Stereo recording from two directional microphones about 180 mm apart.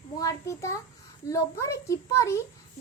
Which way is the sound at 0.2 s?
15° left (ahead or behind).